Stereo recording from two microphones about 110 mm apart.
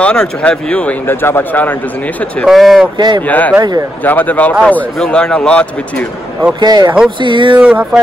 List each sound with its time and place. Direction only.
0.0 s speech: 10° left (ahead or behind)
2.4 s speech: centre (ahead or behind)
3.0 s speech: 40° right (ahead or behind)
3.3 s speech: 15° left (ahead or behind)
6.6 s speech: 40° right (ahead or behind)
7.2 s a sound: 45° right (ahead or behind)
7.5 s music: 10° right (ahead or behind)